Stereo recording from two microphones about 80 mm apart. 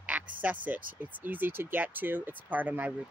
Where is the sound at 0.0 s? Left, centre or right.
Centre.